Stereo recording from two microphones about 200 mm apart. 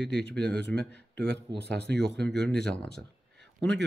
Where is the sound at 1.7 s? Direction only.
55° right (ahead or behind).